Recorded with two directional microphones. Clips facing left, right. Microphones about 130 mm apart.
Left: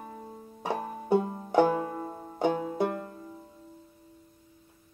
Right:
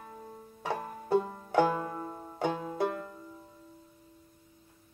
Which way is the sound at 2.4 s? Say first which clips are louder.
Left 4 dB; 20° left (ahead or behind).